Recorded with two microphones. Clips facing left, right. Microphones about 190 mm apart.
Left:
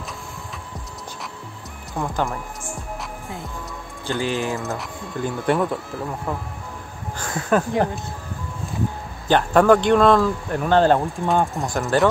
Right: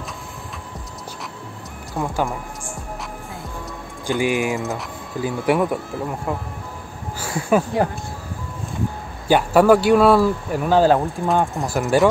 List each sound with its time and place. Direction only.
2.0 s speech: centre (ahead or behind)
4.1 s speech: 15° right (ahead or behind)
4.6 s speech: centre (ahead or behind)
9.3 s speech: 5° right (ahead or behind)